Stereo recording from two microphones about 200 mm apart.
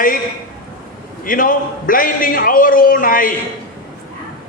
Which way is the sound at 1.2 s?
45° left (ahead or behind).